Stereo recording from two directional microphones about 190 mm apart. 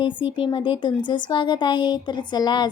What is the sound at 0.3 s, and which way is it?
Speech, 25° left (ahead or behind).